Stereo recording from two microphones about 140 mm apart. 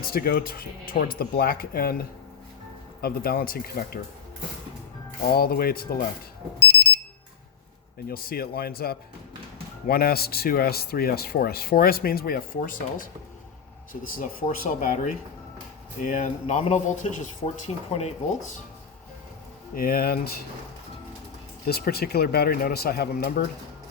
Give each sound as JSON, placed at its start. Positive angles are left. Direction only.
{"t": 0.0, "sound": "speech", "side_deg": 90}
{"t": 5.3, "sound": "speech", "side_deg": 90}
{"t": 8.0, "sound": "speech", "side_deg": 90}
{"t": 14.1, "sound": "speech", "side_deg": 75}
{"t": 19.7, "sound": "speech", "side_deg": 90}
{"t": 21.7, "sound": "speech", "side_deg": 90}